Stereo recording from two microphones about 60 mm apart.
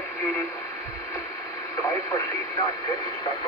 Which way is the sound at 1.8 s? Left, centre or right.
Left.